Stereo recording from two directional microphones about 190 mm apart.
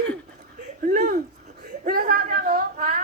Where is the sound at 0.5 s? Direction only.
45° right (ahead or behind).